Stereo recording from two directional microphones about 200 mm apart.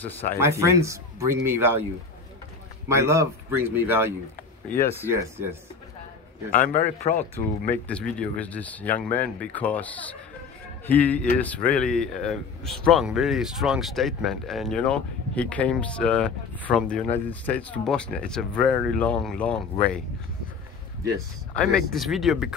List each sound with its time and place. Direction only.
0.4 s speech: 15° right (ahead or behind)
2.9 s speech: 15° right (ahead or behind)
6.7 s speech: 35° left (ahead or behind)
7.7 s speech: 5° left (ahead or behind)
21.5 s speech: centre (ahead or behind)